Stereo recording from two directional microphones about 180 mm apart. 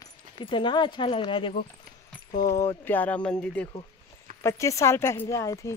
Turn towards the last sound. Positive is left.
turn(degrees=15)  # may be behind; listen again after turning